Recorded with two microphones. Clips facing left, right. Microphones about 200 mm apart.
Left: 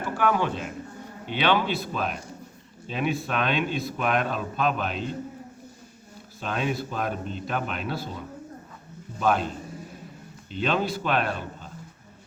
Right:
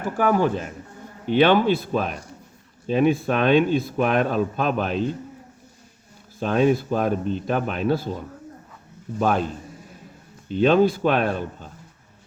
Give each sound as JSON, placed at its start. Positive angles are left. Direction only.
{"t": 0.0, "sound": "a man's voice", "side_deg": -40}
{"t": 6.4, "sound": "speech", "side_deg": -45}
{"t": 9.2, "sound": "speech", "side_deg": -45}
{"t": 10.5, "sound": "speech", "side_deg": -50}